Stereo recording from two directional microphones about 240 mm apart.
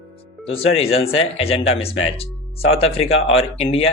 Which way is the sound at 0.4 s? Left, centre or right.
Left.